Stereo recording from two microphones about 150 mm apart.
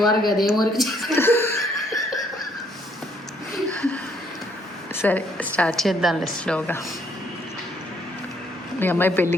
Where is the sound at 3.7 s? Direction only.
10° left (ahead or behind).